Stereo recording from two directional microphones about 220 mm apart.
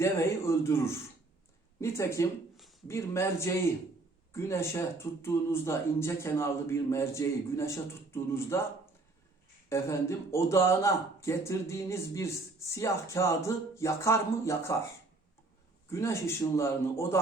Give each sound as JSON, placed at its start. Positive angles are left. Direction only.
{"t": 0.0, "sound": "speech", "side_deg": 10}
{"t": 1.8, "sound": "speech", "side_deg": 15}
{"t": 9.6, "sound": "speech", "side_deg": 10}
{"t": 15.9, "sound": "speech", "side_deg": 10}